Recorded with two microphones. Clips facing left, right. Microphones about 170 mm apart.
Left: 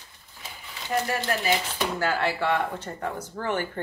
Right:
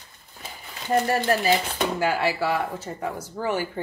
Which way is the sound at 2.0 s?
10° right (ahead or behind).